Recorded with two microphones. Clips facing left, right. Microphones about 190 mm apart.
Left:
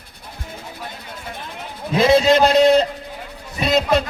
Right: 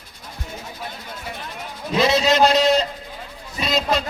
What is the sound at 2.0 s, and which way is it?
A man's voice, 50° left (ahead or behind).